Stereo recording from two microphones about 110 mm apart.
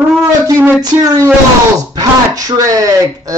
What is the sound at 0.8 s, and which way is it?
Speech, 35° right (ahead or behind).